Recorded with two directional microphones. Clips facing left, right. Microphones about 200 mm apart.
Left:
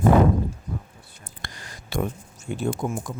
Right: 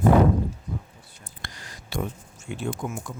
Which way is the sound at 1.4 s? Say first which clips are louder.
Left 2 dB; 55° left (ahead or behind).